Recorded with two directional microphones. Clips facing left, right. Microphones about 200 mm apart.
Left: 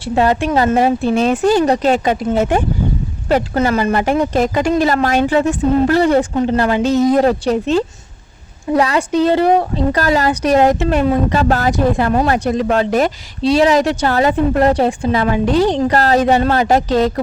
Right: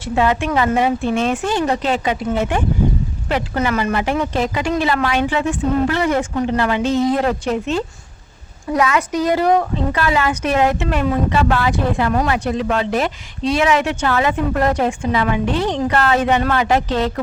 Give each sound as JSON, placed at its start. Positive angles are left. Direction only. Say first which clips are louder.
{"t": 0.0, "sound": "speech", "louder": "left 3 dB", "side_deg": 35}